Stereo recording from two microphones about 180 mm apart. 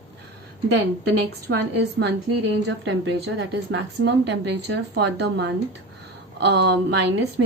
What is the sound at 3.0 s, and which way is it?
Speech, 90° right.